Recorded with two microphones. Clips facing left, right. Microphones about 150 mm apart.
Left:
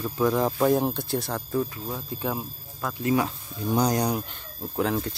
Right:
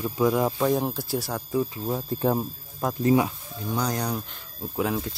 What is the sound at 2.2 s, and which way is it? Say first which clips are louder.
Speech: right 7 dB; 35° right (ahead or behind).